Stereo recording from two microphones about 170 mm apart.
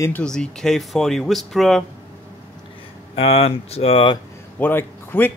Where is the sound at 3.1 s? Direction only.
35° left (ahead or behind).